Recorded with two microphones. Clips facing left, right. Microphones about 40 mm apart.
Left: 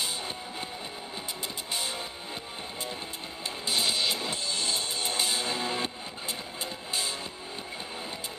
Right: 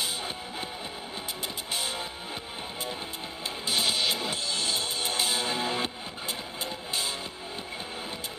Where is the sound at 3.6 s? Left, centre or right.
Centre.